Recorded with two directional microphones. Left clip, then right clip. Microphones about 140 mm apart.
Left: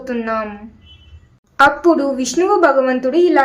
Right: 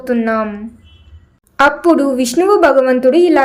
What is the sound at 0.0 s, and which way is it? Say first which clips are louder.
Speech: right 5 dB; 20° right (ahead or behind).